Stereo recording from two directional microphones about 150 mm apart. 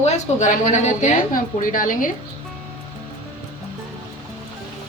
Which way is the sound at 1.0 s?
65° left (ahead or behind).